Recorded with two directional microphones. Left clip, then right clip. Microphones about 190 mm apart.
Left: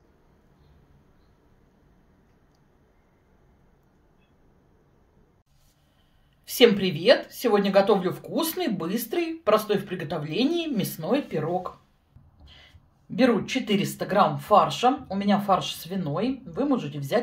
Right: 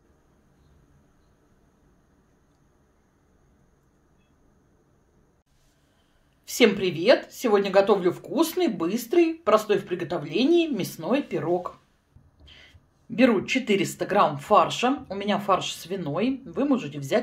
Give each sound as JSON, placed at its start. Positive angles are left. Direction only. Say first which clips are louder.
{"t": 6.4, "sound": "a woman's voice", "louder": "left 2 dB", "side_deg": -20}
{"t": 13.1, "sound": "speech", "louder": "right 1 dB", "side_deg": -30}